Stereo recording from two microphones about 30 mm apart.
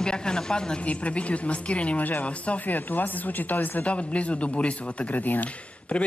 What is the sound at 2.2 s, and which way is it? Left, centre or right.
Speech, left.